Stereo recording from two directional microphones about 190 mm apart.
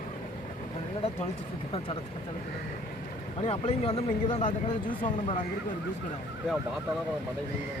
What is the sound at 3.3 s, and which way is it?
Speech, 30° left (ahead or behind).